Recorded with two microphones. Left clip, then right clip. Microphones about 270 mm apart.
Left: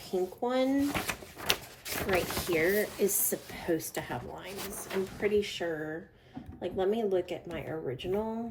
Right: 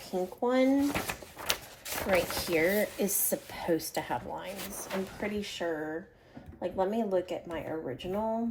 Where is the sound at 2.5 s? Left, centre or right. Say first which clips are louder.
Right 1 dB; right.